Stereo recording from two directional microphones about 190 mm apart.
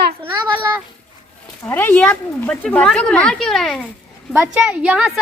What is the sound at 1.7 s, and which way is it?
Speech, 10° left (ahead or behind).